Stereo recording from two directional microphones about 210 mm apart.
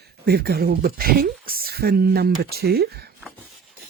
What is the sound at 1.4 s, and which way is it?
Speech, 45° right (ahead or behind).